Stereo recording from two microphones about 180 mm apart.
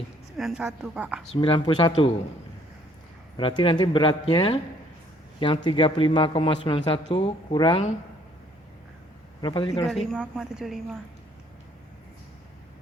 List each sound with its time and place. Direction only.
0.3 s a woman's voice: centre (ahead or behind)
1.4 s a man's voice: 25° left (ahead or behind)
3.3 s a man's voice: 25° left (ahead or behind)
5.6 s a man's voice: 30° left (ahead or behind)
9.4 s a man's voice: 25° left (ahead or behind)
10.1 s a woman's voice: centre (ahead or behind)